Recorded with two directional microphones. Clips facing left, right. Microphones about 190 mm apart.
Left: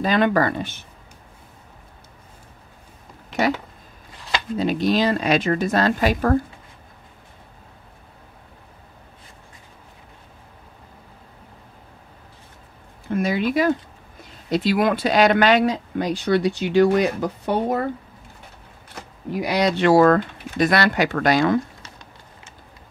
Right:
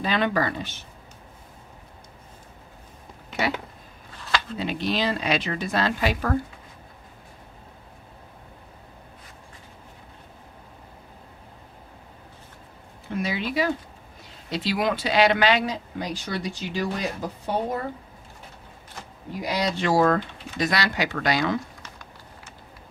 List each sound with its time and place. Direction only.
0.0 s speech: 45° left (ahead or behind)
4.6 s speech: 40° left (ahead or behind)
13.1 s speech: 50° left (ahead or behind); by 17.8 s 70° left (ahead or behind)
19.3 s speech: 70° left (ahead or behind); by 21.5 s 50° left (ahead or behind)
21.8 s a sound: 25° left (ahead or behind)